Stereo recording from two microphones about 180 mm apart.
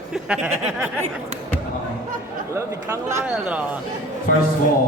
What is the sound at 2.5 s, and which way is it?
Speech, 15° right (ahead or behind).